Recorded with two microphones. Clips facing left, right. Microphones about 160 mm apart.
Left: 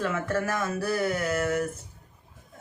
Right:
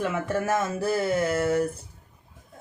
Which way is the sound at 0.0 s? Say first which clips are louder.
Right 1 dB; 20° right (ahead or behind).